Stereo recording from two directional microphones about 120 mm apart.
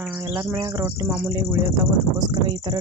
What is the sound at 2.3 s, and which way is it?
Speech, 40° right (ahead or behind).